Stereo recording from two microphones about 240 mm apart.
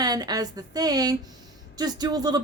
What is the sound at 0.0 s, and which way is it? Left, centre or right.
A woman's voice, centre.